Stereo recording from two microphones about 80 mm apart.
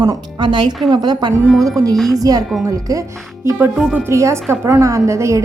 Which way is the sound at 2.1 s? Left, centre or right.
Right.